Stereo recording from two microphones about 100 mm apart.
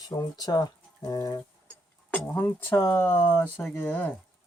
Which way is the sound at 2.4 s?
20° left (ahead or behind).